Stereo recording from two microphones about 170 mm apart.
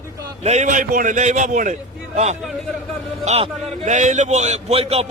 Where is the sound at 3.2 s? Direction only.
40° right (ahead or behind).